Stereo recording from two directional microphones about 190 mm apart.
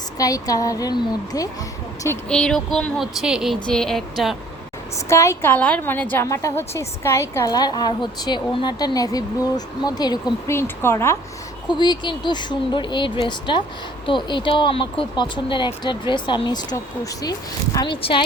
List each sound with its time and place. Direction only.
0.2 s speech: 20° left (ahead or behind)
2.0 s speech: 5° left (ahead or behind)
4.9 s a woman's voice: 15° left (ahead or behind)